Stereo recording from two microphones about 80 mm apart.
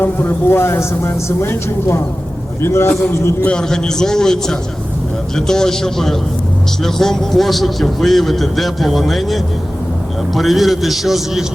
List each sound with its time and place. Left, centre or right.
0.0 s a man's voice: left
3.4 s a man's voice: centre